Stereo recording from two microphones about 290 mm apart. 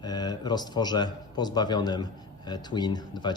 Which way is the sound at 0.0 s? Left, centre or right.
Centre.